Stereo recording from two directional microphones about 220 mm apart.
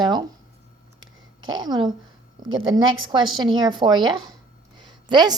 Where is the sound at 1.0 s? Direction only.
65° right (ahead or behind).